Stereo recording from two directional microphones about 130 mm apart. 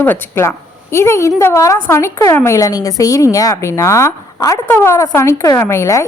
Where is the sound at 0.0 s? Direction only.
15° left (ahead or behind).